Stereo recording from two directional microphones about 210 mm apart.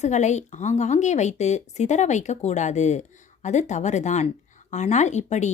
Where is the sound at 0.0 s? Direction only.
35° left (ahead or behind).